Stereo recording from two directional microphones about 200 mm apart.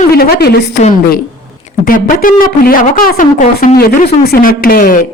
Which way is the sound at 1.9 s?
45° left (ahead or behind).